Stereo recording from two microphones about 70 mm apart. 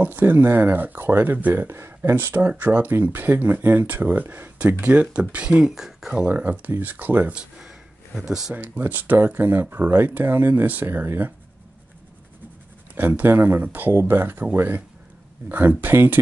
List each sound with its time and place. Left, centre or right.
0.0 s speech: right; by 6.2 s centre
6.2 s speech: right
7.3 s a sound: centre
8.2 s speech: centre
8.5 s speech: right
12.9 s speech: right